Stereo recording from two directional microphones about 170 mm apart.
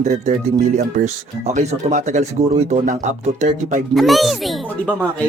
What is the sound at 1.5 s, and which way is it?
Speech, 45° right (ahead or behind).